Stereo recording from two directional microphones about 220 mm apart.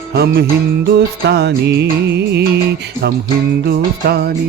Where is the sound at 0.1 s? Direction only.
45° right (ahead or behind).